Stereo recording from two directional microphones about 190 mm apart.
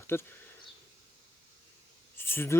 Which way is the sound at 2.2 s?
10° left (ahead or behind).